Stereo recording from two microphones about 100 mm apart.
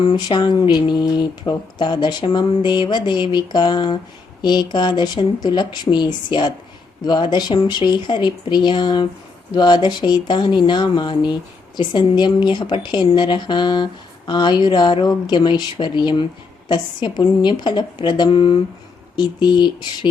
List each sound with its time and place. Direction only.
0.0 s speech: 50° left (ahead or behind)